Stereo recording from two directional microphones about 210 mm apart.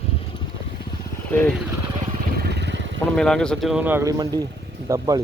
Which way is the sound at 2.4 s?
50° right (ahead or behind).